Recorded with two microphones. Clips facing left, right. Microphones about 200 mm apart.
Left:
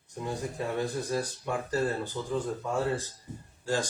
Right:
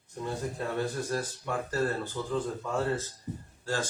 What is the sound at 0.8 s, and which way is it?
Speech, 15° left (ahead or behind).